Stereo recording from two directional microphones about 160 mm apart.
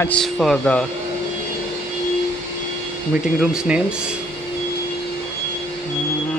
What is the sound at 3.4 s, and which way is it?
Speech, 5° right (ahead or behind).